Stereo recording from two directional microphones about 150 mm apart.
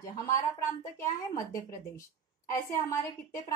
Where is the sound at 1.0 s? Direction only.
20° left (ahead or behind).